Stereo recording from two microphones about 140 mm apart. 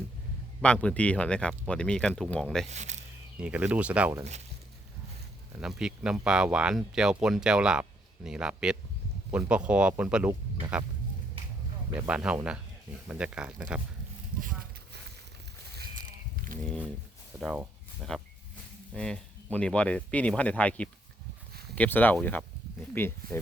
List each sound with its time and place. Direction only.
0.6 s speech: 10° left (ahead or behind)
2.6 s speech: 55° right (ahead or behind)
3.4 s speech: 10° right (ahead or behind)
5.5 s speech: 5° right (ahead or behind)
11.9 s speech: 10° right (ahead or behind)
15.8 s a sound: 85° right
18.1 s speech: 5° left (ahead or behind)